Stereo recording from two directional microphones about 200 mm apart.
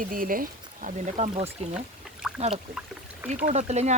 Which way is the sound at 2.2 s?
Centre (ahead or behind).